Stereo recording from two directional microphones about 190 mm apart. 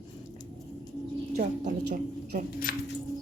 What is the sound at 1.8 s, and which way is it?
Speech, 55° right (ahead or behind).